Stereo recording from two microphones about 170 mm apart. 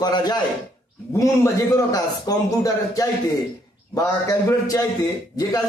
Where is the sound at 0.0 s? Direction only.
25° left (ahead or behind).